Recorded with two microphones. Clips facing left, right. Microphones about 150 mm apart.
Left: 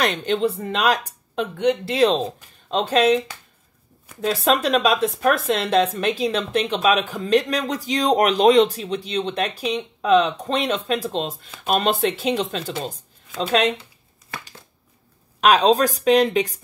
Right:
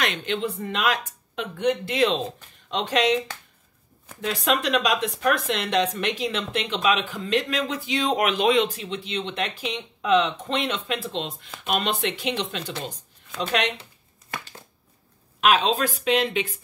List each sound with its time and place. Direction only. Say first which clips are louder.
0.0 s speech: left 6 dB; 40° left (ahead or behind)
4.2 s speech: left 5 dB; 35° left (ahead or behind)
15.4 s speech: left 5 dB; 40° left (ahead or behind)